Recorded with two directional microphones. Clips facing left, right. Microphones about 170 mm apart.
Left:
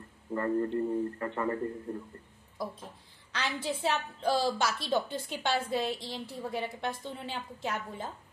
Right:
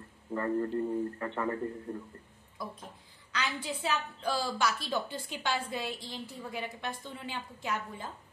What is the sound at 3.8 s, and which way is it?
A woman's voice, 30° left (ahead or behind).